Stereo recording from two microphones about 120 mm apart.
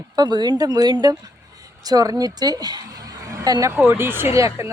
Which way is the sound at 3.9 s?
20° right (ahead or behind).